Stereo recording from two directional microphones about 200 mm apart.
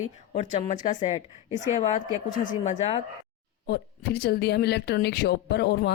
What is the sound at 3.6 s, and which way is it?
A woman's voice, 55° left (ahead or behind).